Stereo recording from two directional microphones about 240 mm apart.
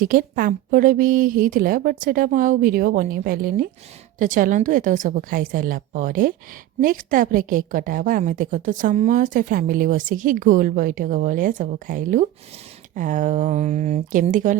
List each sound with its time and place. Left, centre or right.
0.0 s a woman's voice: right